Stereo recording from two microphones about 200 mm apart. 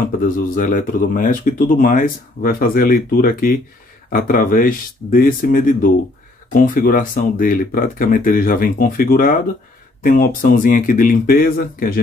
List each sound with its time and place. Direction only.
0.2 s speech: 40° left (ahead or behind)